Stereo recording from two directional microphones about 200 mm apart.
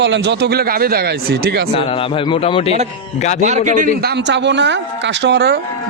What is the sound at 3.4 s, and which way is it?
Speech, 35° right (ahead or behind).